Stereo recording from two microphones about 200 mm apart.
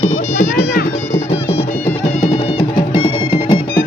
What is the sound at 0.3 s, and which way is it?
Music, 45° left (ahead or behind).